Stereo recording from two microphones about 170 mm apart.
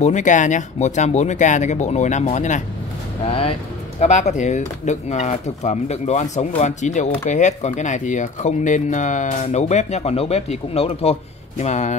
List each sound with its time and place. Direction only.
0.0 s speech: 45° left (ahead or behind)
3.3 s speech: 35° left (ahead or behind)